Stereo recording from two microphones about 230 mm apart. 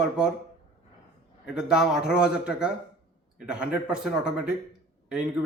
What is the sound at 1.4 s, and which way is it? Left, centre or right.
A man's voice, centre.